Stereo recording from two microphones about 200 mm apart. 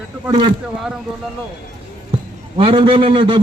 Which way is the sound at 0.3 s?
25° right (ahead or behind).